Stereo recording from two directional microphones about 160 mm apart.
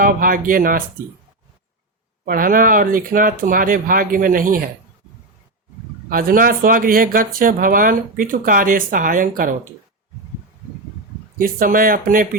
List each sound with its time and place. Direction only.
0.0 s speech: 60° right (ahead or behind)
2.2 s speech: 60° right (ahead or behind)
6.1 s speech: 65° right (ahead or behind)
11.3 s speech: 60° right (ahead or behind)